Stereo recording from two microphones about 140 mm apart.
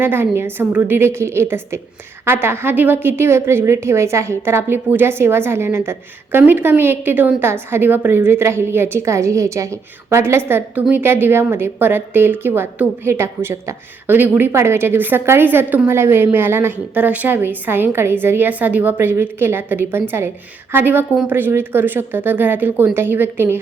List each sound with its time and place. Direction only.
0.0 s a woman's voice: 15° right (ahead or behind)